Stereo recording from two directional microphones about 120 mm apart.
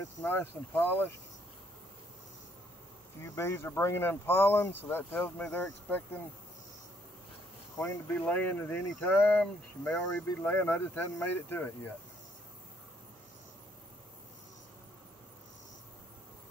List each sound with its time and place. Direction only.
0.2 s speech: 15° left (ahead or behind)
3.2 s speech: 25° left (ahead or behind)
7.7 s speech: 25° left (ahead or behind); by 10.0 s 5° left (ahead or behind)
10.2 s speech: 20° left (ahead or behind)